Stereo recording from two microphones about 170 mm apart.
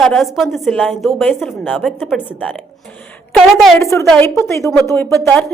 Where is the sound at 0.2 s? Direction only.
Centre (ahead or behind).